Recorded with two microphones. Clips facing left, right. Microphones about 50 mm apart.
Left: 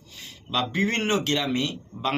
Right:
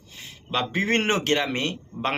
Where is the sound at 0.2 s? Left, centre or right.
Right.